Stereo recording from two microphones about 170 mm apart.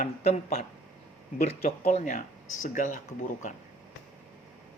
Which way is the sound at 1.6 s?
60° left (ahead or behind).